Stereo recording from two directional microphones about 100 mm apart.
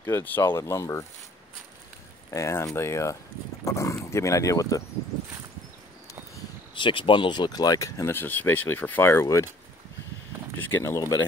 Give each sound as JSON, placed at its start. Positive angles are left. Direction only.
{"t": 0.0, "sound": "speech", "side_deg": 20}
{"t": 2.3, "sound": "speech", "side_deg": 30}
{"t": 6.7, "sound": "speech", "side_deg": 55}
{"t": 8.0, "sound": "speech", "side_deg": 20}
{"t": 10.8, "sound": "speech", "side_deg": 35}